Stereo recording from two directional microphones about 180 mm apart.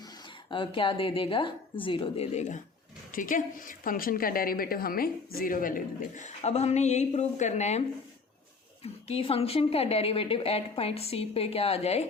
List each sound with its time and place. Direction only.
0.5 s a woman's voice: 30° left (ahead or behind)